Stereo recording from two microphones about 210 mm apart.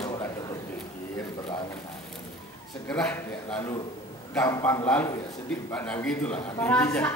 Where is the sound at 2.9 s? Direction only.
5° left (ahead or behind).